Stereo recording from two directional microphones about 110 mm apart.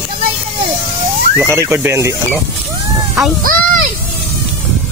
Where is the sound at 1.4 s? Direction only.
25° right (ahead or behind).